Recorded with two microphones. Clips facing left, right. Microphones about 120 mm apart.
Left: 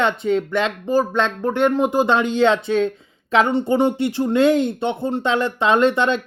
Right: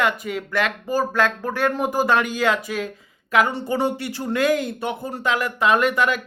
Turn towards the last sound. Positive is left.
turn(degrees=25)  # may be behind; listen again after turning